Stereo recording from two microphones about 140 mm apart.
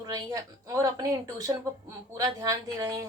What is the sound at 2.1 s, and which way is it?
Speech, 25° right (ahead or behind).